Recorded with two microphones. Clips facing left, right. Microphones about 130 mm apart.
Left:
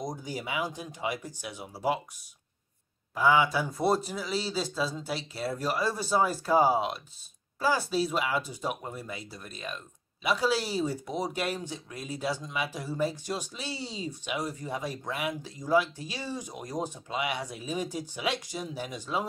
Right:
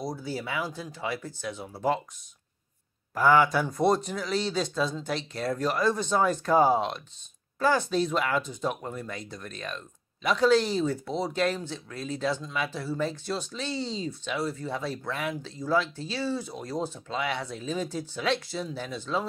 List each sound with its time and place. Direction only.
0.0 s speech: 15° left (ahead or behind)
3.2 s speech: centre (ahead or behind)